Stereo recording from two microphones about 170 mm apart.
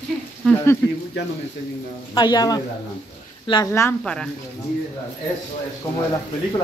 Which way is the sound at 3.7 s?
15° left (ahead or behind).